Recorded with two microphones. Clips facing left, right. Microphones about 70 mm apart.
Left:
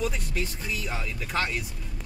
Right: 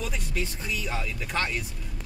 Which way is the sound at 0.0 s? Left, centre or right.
Centre.